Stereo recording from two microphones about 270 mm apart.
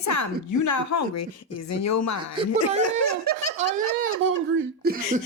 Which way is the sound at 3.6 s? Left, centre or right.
Left.